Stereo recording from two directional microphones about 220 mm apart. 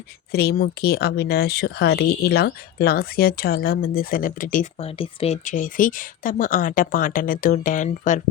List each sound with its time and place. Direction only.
0.3 s speech: 45° left (ahead or behind)